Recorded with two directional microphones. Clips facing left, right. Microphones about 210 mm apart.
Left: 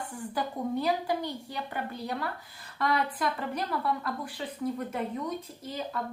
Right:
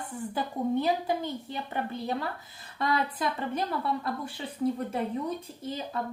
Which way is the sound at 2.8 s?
25° right (ahead or behind).